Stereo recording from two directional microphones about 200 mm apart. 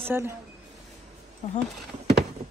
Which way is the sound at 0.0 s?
10° right (ahead or behind).